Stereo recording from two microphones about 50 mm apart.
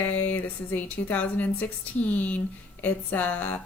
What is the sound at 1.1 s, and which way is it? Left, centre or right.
Speech, left.